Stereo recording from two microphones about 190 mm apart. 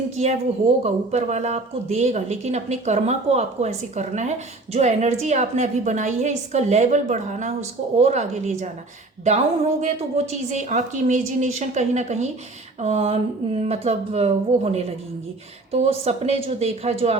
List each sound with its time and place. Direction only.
0.9 s speech: 35° right (ahead or behind)